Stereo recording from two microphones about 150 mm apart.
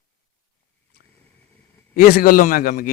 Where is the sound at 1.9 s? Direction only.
85° left.